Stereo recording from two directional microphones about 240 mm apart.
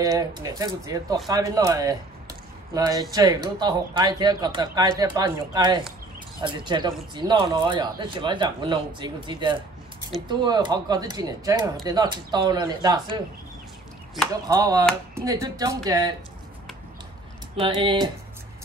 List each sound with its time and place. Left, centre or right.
0.2 s speech: centre
14.5 s speech: centre
17.6 s speech: centre